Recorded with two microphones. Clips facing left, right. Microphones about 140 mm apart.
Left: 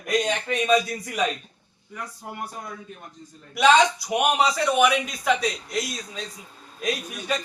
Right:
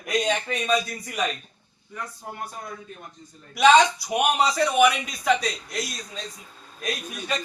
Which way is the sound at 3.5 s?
Centre (ahead or behind).